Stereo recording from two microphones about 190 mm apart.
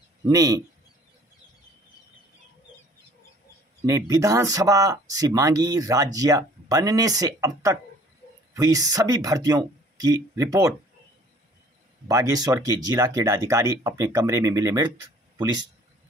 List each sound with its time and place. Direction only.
0.3 s speech: 20° right (ahead or behind)
3.8 s speech: 15° right (ahead or behind)
12.1 s speech: 15° right (ahead or behind)